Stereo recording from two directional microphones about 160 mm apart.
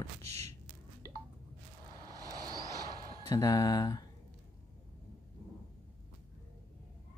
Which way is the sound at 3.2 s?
20° left (ahead or behind).